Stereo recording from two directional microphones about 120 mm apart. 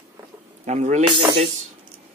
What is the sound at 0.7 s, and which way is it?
Speech, 70° right (ahead or behind).